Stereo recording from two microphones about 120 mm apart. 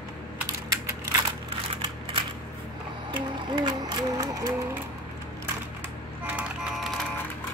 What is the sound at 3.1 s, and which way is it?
Music, 35° right (ahead or behind).